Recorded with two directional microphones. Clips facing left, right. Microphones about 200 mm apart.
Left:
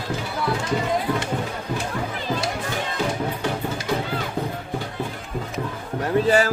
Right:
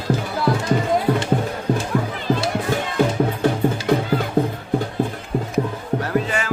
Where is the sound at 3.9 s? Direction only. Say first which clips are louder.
Right 6 dB; 55° right (ahead or behind).